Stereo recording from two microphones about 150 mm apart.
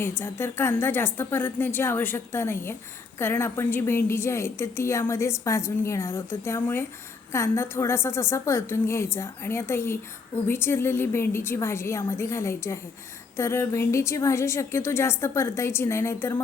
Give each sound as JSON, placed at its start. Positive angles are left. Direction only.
{"t": 0.2, "sound": "a woman's voice", "side_deg": 15}